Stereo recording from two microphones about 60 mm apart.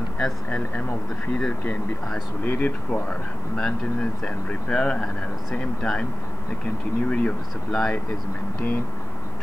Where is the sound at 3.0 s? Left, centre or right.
Centre.